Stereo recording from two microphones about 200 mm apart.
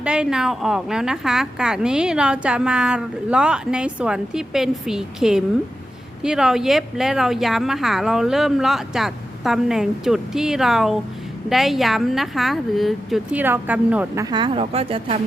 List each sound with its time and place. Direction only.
0.0 s a woman's voice: 5° right (ahead or behind)
14.3 s speech: 25° right (ahead or behind)